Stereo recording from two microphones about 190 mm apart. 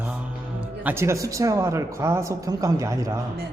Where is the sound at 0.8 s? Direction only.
15° right (ahead or behind).